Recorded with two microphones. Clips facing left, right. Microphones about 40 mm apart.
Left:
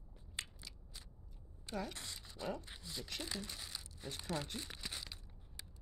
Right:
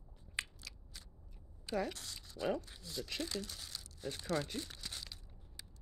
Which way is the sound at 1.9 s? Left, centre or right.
Left.